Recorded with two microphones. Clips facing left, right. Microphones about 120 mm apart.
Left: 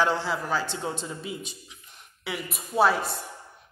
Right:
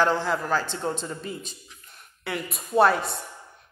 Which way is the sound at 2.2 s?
5° left (ahead or behind).